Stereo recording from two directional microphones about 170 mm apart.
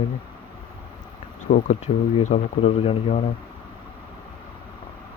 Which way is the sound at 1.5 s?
45° left (ahead or behind).